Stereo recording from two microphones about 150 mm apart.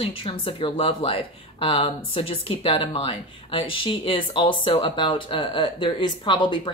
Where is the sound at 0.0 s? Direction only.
35° left (ahead or behind).